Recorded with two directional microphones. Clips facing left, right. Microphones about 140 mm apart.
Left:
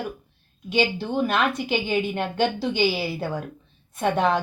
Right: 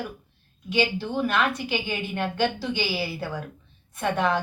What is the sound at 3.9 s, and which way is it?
Speech, 30° left (ahead or behind).